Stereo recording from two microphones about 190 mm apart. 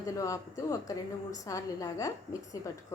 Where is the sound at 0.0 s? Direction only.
15° left (ahead or behind).